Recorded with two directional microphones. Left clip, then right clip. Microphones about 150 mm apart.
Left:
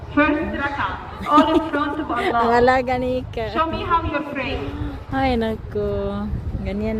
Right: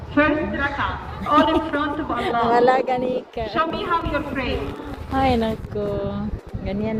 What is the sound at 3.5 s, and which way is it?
A woman's voice, 5° left (ahead or behind).